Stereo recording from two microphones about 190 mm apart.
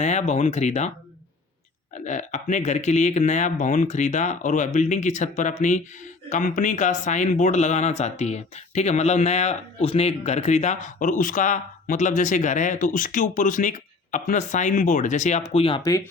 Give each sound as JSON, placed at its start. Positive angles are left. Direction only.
{"t": 0.0, "sound": "speech", "side_deg": 40}
{"t": 2.0, "sound": "speech", "side_deg": 40}
{"t": 15.8, "sound": "speech", "side_deg": 15}